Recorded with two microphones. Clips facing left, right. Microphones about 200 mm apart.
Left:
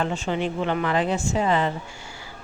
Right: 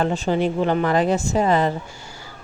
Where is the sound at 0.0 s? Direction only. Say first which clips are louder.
Right 5 dB; 35° right (ahead or behind).